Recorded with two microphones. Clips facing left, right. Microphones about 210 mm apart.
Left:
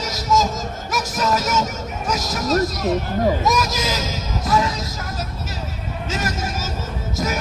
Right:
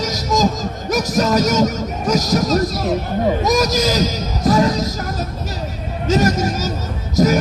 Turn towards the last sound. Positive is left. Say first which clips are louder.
# right 10 dB
turn(degrees=-40)  # may be behind; listen again after turning